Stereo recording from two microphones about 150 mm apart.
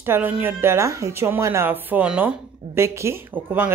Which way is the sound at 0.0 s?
15° right (ahead or behind).